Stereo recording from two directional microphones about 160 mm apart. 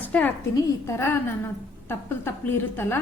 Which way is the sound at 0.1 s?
10° left (ahead or behind).